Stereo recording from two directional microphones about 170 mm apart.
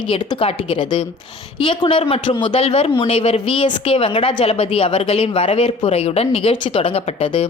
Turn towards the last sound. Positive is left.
turn(degrees=35)  # may be behind; listen again after turning